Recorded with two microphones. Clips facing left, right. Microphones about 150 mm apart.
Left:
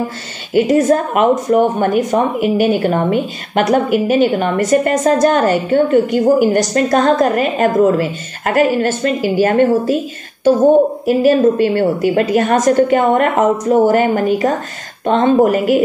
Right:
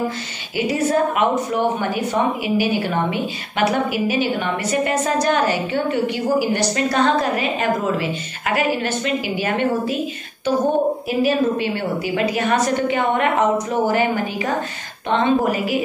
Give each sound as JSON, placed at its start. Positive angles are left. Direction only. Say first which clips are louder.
{"t": 0.6, "sound": "a woman's voice", "louder": "left 7 dB", "side_deg": 50}
{"t": 11.1, "sound": "a woman's voice", "louder": "left 7 dB", "side_deg": 45}